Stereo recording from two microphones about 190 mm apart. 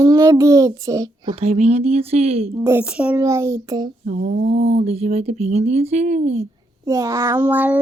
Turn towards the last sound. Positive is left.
turn(degrees=-10)  # may be behind; listen again after turning